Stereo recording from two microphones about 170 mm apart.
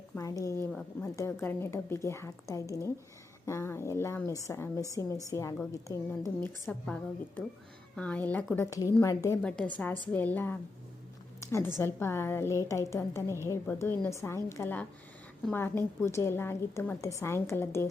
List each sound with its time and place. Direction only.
0.2 s a woman's voice: 20° left (ahead or behind)
9.4 s a woman's voice: 5° left (ahead or behind)
11.3 s a sound: 15° left (ahead or behind)
11.8 s a woman's voice: 15° left (ahead or behind)